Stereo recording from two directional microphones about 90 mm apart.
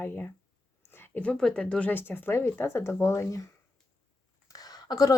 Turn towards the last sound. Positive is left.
turn(degrees=40)  # may be behind; listen again after turning